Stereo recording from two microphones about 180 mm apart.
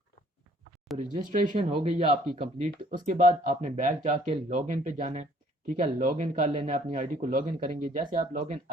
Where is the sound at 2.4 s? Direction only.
50° right (ahead or behind).